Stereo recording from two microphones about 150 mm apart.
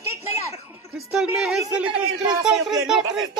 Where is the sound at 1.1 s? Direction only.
5° right (ahead or behind).